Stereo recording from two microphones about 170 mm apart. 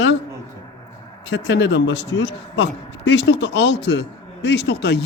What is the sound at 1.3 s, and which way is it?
A man's voice, 90° left.